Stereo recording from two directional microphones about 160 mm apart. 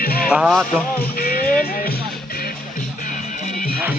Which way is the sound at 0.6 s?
70° left (ahead or behind).